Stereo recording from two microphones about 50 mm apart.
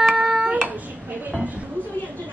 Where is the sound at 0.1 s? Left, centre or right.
Centre.